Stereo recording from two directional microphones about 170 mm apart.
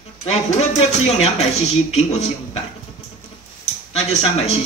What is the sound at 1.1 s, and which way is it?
Speech, 40° left (ahead or behind).